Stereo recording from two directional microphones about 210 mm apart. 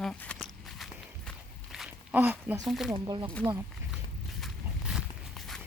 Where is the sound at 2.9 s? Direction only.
20° right (ahead or behind).